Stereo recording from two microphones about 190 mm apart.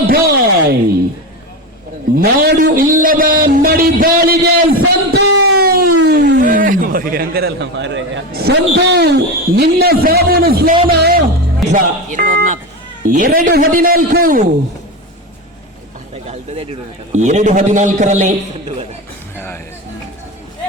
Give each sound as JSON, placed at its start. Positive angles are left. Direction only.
{"t": 0.1, "sound": "speech", "side_deg": -55}
{"t": 2.1, "sound": "a man's voice", "side_deg": -50}
{"t": 4.8, "sound": "music", "side_deg": -70}
{"t": 6.4, "sound": "a man's voice", "side_deg": -45}
{"t": 11.7, "sound": "a man's voice", "side_deg": -45}
{"t": 16.2, "sound": "a man's voice", "side_deg": -35}